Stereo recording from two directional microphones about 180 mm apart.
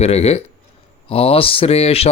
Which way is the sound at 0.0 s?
35° left (ahead or behind).